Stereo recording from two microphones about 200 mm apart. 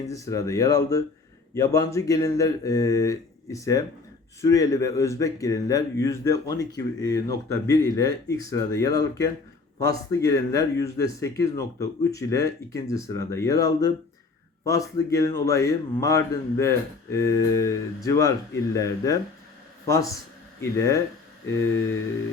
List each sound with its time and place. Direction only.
0.0 s a man's voice: 15° left (ahead or behind)